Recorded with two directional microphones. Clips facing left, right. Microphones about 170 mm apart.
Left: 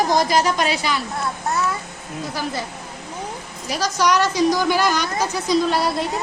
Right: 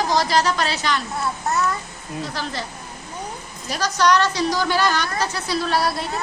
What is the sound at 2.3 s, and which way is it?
Speech, 10° left (ahead or behind).